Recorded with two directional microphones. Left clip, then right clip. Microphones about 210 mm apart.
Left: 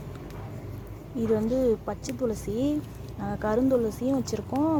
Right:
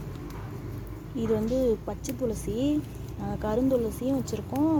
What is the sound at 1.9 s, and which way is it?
Speech, 10° left (ahead or behind).